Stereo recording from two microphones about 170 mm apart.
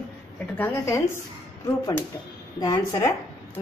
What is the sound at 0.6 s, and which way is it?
Speech, 15° left (ahead or behind).